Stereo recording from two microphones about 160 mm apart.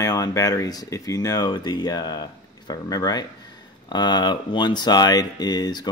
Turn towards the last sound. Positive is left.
turn(degrees=25)  # may be behind; listen again after turning